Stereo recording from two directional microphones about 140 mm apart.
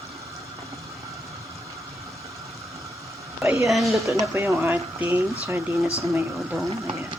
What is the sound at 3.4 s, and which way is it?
Speech, 20° right (ahead or behind).